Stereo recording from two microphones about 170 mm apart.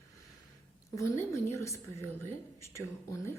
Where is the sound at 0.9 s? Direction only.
15° left (ahead or behind).